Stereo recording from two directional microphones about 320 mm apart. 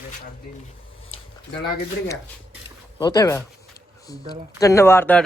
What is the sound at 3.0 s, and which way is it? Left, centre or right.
Speech, centre.